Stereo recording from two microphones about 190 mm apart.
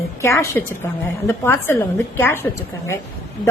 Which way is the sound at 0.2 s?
15° left (ahead or behind).